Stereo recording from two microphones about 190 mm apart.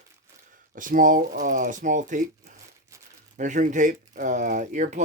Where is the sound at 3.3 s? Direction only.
40° right (ahead or behind).